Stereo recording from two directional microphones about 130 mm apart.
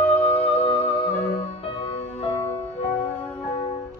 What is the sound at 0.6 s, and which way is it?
Music, 45° left (ahead or behind).